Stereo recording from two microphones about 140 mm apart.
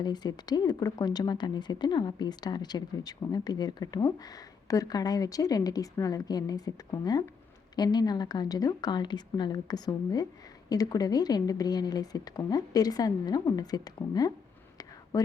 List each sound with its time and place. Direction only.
0.0 s speech: 30° left (ahead or behind)